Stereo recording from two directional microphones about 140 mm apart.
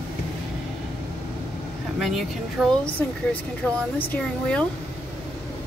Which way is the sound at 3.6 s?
5° left (ahead or behind).